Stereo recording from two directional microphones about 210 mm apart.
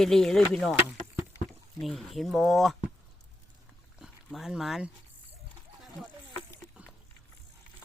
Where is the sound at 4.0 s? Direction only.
Centre (ahead or behind).